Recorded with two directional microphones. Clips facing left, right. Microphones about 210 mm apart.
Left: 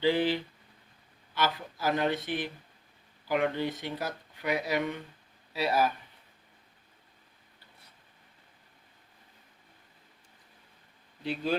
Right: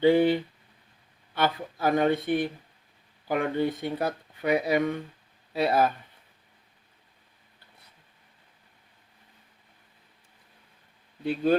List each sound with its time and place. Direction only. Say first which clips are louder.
0.0 s speech: right 6 dB; 55° right (ahead or behind)
11.2 s speech: right 7 dB; 50° right (ahead or behind)